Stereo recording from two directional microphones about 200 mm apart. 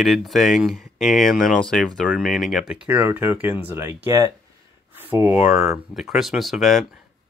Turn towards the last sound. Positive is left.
turn(degrees=0)  # may be behind; listen again after turning